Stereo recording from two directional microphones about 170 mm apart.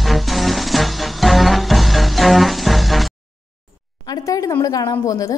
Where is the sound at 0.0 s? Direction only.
Centre (ahead or behind).